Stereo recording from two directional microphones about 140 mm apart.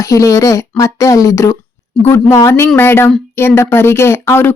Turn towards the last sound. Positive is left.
turn(degrees=15)  # may be behind; listen again after turning